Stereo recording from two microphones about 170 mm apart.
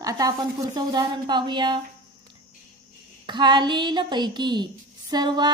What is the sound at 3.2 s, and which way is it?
A woman's voice, 25° right (ahead or behind).